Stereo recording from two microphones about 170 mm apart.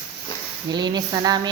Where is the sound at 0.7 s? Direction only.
25° right (ahead or behind).